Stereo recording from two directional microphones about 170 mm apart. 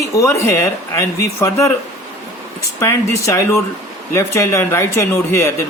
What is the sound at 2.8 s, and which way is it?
Speech, 15° left (ahead or behind).